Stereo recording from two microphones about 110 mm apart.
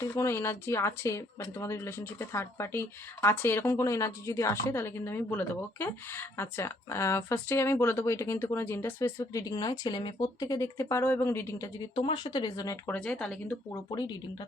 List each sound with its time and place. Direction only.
0.0 s speech: 25° left (ahead or behind)
9.5 s speech: 40° left (ahead or behind)
11.9 s speech: 50° left (ahead or behind)
13.1 s speech: 5° left (ahead or behind)